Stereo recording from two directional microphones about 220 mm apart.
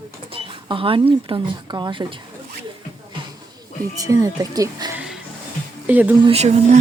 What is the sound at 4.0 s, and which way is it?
Speech, 15° right (ahead or behind).